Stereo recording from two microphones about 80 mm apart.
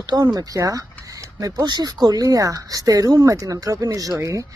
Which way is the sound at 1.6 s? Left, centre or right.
Right.